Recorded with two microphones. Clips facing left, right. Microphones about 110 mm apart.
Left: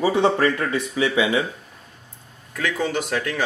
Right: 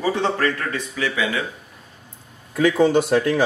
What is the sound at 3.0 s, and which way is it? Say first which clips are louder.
Speech: right 7 dB; 5° right (ahead or behind).